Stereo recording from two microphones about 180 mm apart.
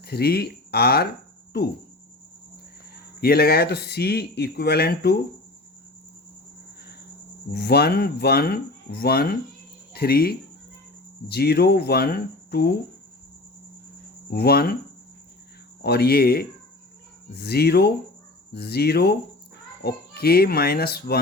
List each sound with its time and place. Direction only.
0.0 s speech: 60° left (ahead or behind)
3.2 s speech: 60° left (ahead or behind)
7.5 s speech: 65° left (ahead or behind)
14.3 s speech: 60° left (ahead or behind)
15.8 s speech: 60° left (ahead or behind)